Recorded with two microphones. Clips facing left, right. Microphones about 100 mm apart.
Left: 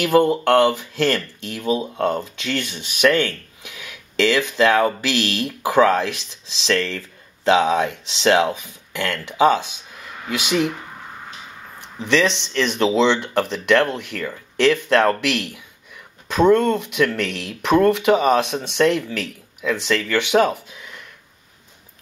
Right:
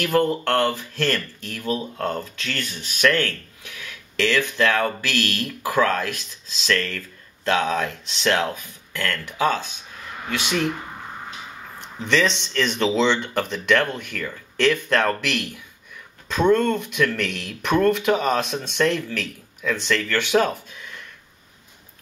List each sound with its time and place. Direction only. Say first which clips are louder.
0.0 s speech: left 4 dB; 20° left (ahead or behind)
12.0 s speech: left 2 dB; 10° left (ahead or behind)